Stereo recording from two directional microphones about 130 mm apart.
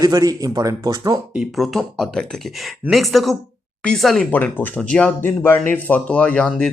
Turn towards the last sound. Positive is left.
turn(degrees=10)  # may be behind; listen again after turning